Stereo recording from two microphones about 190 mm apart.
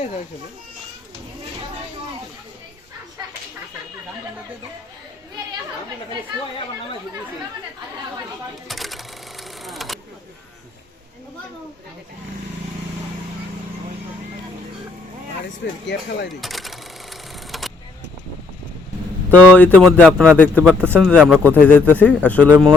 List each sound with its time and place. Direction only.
8.6 s sewing machine: centre (ahead or behind)
15.6 s speech: 65° left (ahead or behind)
16.4 s a sound: centre (ahead or behind)
19.3 s speech: 5° left (ahead or behind)
20.8 s speech: 10° right (ahead or behind)
21.1 s speech: 5° left (ahead or behind)